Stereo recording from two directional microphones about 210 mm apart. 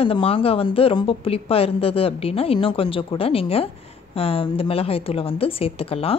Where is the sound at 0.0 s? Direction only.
25° left (ahead or behind).